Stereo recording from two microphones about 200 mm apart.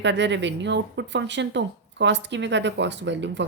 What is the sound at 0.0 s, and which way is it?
A woman's voice, 60° right (ahead or behind).